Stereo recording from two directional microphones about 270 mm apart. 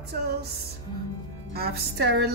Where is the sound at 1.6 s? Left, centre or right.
Right.